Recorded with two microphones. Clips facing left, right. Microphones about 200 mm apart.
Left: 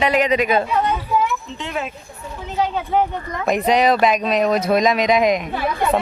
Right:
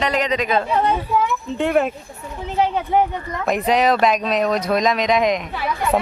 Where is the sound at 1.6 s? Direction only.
55° right (ahead or behind).